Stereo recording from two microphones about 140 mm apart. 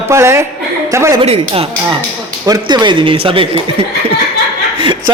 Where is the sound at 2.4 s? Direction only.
30° right (ahead or behind).